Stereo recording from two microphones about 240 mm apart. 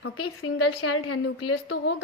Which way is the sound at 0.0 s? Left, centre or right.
Left.